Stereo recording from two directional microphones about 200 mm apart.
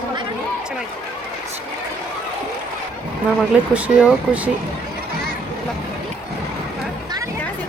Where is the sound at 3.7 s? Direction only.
5° right (ahead or behind).